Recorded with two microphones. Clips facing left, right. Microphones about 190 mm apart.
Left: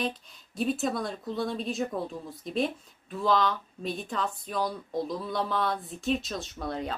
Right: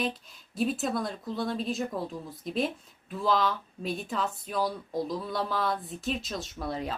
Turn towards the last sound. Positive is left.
turn(degrees=0)  # may be behind; listen again after turning